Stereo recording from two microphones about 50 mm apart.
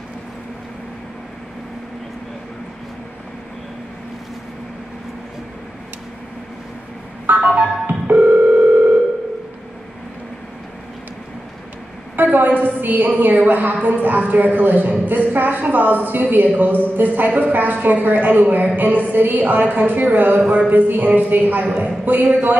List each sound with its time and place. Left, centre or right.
7.2 s music: right
8.1 s telephone: right
12.2 s a sound: right
12.6 s a woman's voice: right